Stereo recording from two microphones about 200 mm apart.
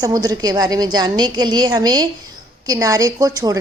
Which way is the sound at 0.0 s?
20° right (ahead or behind).